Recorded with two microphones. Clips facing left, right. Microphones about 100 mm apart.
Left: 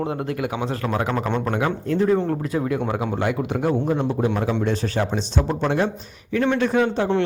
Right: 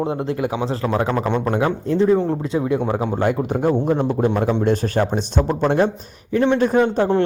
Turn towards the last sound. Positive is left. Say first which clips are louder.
# right 3 dB
turn(degrees=-40)  # may be behind; listen again after turning